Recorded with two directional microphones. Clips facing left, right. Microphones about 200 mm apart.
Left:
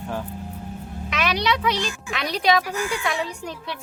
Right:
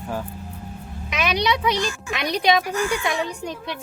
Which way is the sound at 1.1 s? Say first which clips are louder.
Right 1 dB; 15° right (ahead or behind).